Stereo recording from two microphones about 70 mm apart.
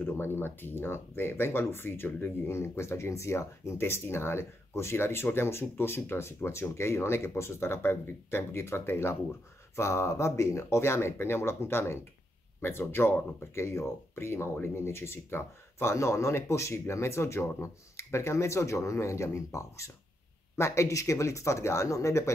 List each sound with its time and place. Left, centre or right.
0.0 s speech: left